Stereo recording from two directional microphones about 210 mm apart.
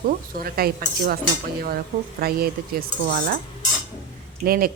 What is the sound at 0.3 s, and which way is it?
A woman's voice, 45° right (ahead or behind).